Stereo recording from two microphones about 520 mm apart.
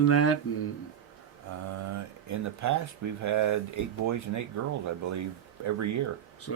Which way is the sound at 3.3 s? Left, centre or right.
Right.